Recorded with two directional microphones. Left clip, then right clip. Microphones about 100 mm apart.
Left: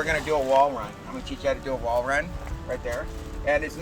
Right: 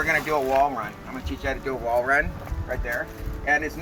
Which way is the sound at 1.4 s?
30° left (ahead or behind).